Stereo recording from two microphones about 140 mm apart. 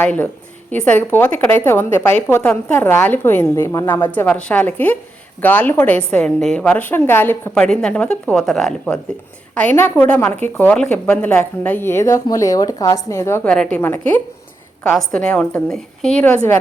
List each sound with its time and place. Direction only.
0.0 s a woman's voice: 10° left (ahead or behind)
13.5 s a woman's voice: 5° left (ahead or behind)